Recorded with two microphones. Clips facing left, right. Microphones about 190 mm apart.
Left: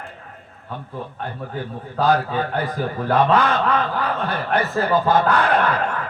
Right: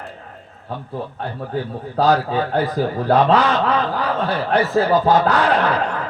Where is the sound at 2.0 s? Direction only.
55° left (ahead or behind).